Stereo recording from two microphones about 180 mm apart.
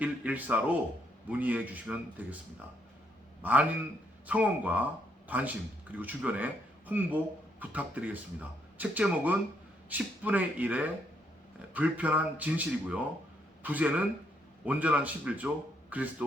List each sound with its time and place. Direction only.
0.0 s speech: 10° right (ahead or behind)
3.4 s speech: 10° right (ahead or behind)